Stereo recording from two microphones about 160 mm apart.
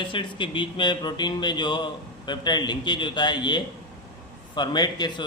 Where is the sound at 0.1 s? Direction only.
30° left (ahead or behind).